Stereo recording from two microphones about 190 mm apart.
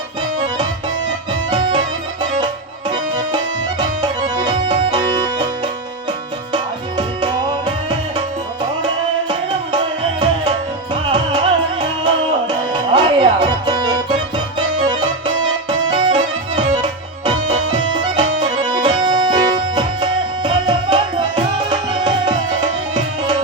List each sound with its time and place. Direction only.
2.9 s music: 20° right (ahead or behind)
6.5 s music: 25° right (ahead or behind)
9.7 s music: 20° right (ahead or behind)
15.9 s music: 20° right (ahead or behind)
17.2 s music: 20° right (ahead or behind)